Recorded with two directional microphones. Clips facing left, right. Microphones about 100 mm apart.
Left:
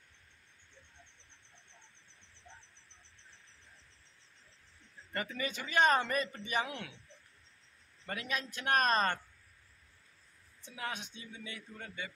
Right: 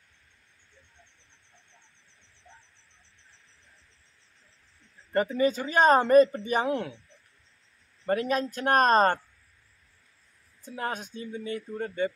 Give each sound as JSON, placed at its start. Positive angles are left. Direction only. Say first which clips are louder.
{"t": 5.1, "sound": "speech", "louder": "right 14 dB", "side_deg": -35}
{"t": 8.0, "sound": "speech", "louder": "right 13 dB", "side_deg": -40}
{"t": 10.6, "sound": "speech", "louder": "right 8 dB", "side_deg": -45}